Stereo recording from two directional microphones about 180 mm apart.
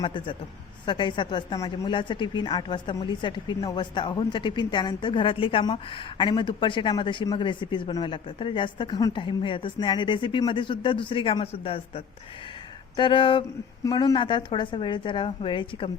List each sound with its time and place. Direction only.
0.0 s speech: 30° left (ahead or behind)